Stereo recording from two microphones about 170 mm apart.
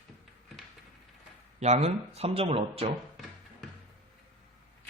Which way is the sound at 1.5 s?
40° right (ahead or behind).